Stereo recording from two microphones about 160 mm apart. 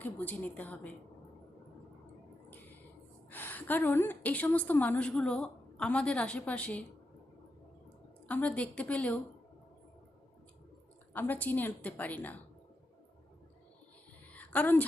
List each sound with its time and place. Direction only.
0.0 s a woman's voice: 10° left (ahead or behind)
3.2 s a woman's voice: 10° left (ahead or behind)
8.3 s a woman's voice: 10° left (ahead or behind)
11.1 s a woman's voice: 10° left (ahead or behind)
14.3 s a woman's voice: 10° left (ahead or behind)